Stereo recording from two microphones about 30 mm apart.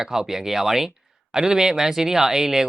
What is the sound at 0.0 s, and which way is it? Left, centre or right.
Speech, centre.